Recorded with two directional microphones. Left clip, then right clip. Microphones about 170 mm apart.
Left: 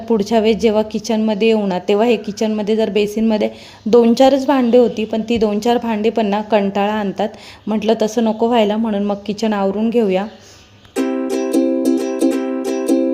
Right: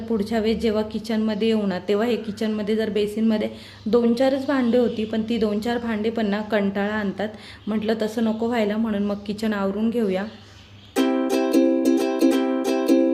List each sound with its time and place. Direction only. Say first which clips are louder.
0.1 s a woman's voice: left 9 dB; 40° left (ahead or behind)
10.9 s music: left 2 dB; 5° left (ahead or behind)